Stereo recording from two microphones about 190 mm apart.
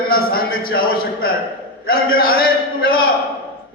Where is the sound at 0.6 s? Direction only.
50° left (ahead or behind).